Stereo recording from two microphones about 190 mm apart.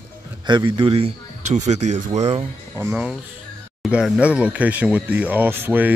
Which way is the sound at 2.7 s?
10° right (ahead or behind).